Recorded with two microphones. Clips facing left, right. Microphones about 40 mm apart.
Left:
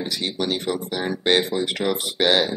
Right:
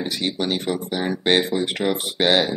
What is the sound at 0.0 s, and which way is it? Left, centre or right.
Speech, centre.